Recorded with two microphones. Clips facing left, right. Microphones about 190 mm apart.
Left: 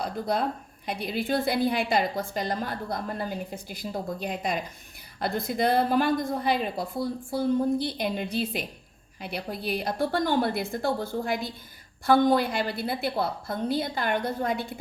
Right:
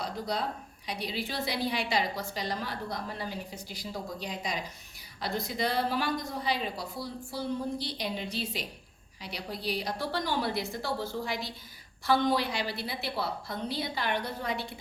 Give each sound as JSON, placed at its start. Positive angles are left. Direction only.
{"t": 0.0, "sound": "a woman's voice", "side_deg": 55}